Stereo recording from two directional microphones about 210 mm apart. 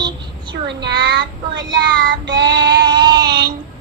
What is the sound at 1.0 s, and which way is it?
Child singing, 60° right (ahead or behind).